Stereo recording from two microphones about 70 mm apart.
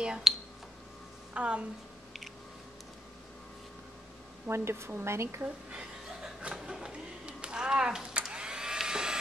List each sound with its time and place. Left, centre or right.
0.0 s speech: centre
1.3 s a woman's voice: centre
4.5 s speech: right
5.7 s chuckle: centre